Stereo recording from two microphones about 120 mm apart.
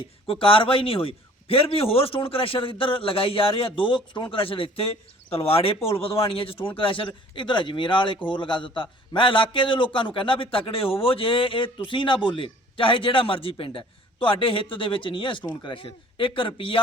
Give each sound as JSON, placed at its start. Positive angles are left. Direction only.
{"t": 0.3, "sound": "a man's voice", "side_deg": 50}